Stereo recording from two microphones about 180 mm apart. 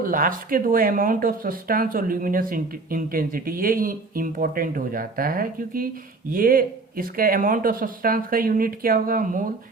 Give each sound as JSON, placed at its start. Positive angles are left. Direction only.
{"t": 0.0, "sound": "speech", "side_deg": -50}